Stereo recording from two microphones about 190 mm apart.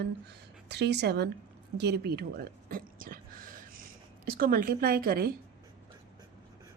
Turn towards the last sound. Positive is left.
turn(degrees=-50)  # may be behind; listen again after turning